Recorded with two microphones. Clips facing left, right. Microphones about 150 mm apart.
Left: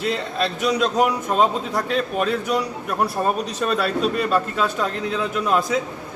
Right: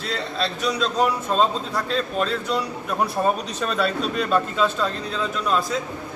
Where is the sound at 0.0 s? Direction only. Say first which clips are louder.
Left 3 dB; 15° left (ahead or behind).